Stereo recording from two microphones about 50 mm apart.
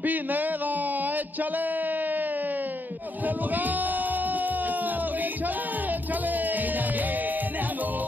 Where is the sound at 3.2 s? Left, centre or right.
Right.